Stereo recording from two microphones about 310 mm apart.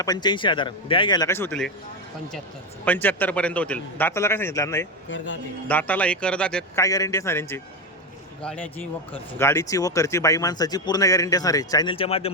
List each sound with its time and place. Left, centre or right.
0.0 s a man's voice: centre
2.8 s a man's voice: centre
5.0 s a man's voice: left
5.6 s a man's voice: centre